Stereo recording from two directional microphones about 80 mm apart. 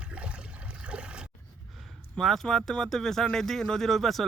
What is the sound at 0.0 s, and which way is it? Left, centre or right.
Water, centre.